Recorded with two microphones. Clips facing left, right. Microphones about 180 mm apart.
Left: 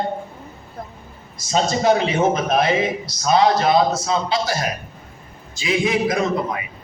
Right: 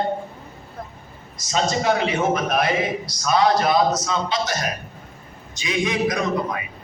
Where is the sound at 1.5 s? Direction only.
30° left (ahead or behind).